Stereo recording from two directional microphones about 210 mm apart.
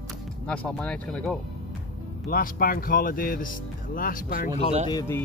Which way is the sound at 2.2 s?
45° left (ahead or behind).